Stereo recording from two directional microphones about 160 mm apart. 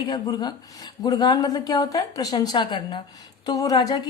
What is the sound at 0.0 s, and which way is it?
A woman's voice, 25° left (ahead or behind).